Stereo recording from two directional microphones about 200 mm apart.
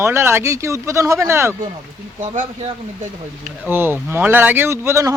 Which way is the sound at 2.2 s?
35° right (ahead or behind).